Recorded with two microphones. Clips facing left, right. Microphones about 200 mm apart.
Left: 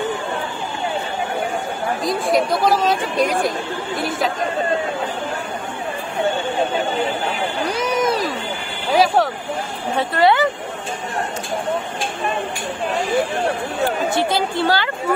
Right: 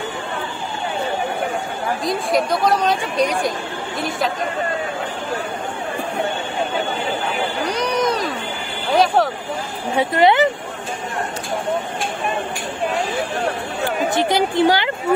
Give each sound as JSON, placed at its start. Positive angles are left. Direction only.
{"t": 2.0, "sound": "speech", "side_deg": 0}
{"t": 7.7, "sound": "a sound", "side_deg": 5}
{"t": 9.9, "sound": "speech", "side_deg": -20}
{"t": 14.1, "sound": "a woman's voice", "side_deg": -15}